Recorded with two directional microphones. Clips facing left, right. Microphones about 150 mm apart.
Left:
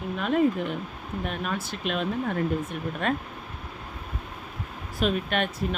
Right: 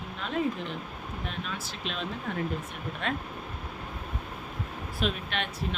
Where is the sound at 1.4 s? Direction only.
55° left (ahead or behind).